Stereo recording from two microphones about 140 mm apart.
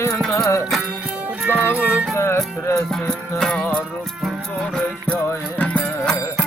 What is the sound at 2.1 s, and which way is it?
Music, 20° left (ahead or behind).